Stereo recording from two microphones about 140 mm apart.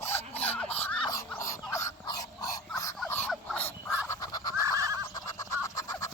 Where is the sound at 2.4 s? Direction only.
25° left (ahead or behind).